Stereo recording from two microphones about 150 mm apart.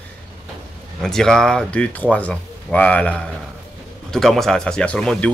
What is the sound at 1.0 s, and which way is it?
Speech, 5° left (ahead or behind).